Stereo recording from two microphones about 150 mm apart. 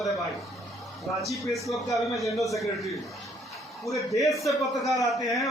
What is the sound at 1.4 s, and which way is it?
Speech, centre (ahead or behind).